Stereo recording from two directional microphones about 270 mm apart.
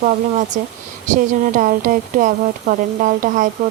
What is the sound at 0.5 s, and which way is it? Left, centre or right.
A woman's voice, right.